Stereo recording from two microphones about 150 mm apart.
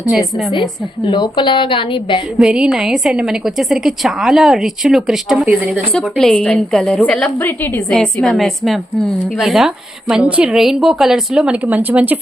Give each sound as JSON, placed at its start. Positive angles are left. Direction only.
{"t": 0.1, "sound": "a woman's voice", "side_deg": 0}
{"t": 1.0, "sound": "a woman's voice", "side_deg": 30}
{"t": 2.4, "sound": "a woman's voice", "side_deg": -5}
{"t": 7.9, "sound": "a woman's voice", "side_deg": 0}